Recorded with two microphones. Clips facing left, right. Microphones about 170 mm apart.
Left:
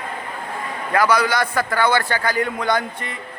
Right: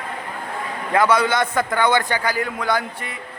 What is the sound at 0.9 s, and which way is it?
A man's voice, 25° right (ahead or behind).